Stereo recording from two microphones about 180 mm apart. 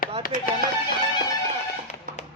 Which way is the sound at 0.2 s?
50° left (ahead or behind).